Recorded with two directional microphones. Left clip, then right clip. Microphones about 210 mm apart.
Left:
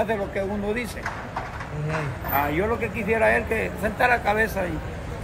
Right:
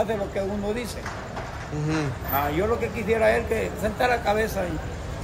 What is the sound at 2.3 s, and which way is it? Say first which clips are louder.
Speech: left 1 dB; 5° right (ahead or behind).